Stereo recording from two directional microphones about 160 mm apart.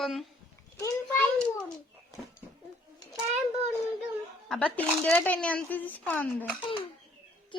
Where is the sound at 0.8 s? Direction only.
15° left (ahead or behind).